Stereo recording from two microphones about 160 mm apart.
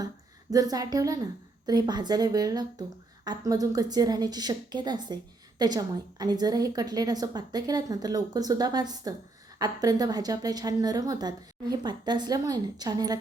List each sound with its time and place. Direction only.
0.5 s a woman's voice: 25° right (ahead or behind)